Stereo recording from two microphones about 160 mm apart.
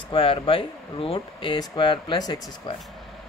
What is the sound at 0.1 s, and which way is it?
Speech, 35° left (ahead or behind).